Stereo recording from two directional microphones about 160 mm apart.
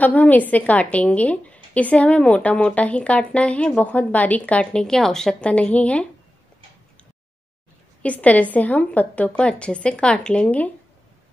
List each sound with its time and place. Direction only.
0.0 s a woman's voice: 10° left (ahead or behind)
8.0 s a woman's voice: 10° left (ahead or behind)